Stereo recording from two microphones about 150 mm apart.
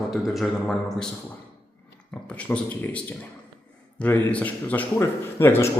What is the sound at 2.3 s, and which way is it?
A man's voice, 10° left (ahead or behind).